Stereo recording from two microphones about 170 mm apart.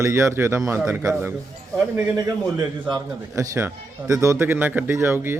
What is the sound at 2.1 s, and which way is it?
A man's voice, 25° right (ahead or behind).